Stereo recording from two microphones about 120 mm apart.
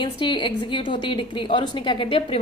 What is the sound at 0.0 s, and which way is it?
A woman's voice, 45° left (ahead or behind).